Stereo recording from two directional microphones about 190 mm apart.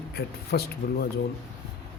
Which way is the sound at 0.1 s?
55° left (ahead or behind).